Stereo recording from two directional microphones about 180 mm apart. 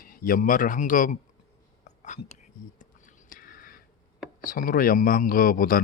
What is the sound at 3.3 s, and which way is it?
Whispering, 50° left (ahead or behind).